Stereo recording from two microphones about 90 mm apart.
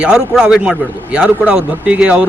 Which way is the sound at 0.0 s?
10° right (ahead or behind).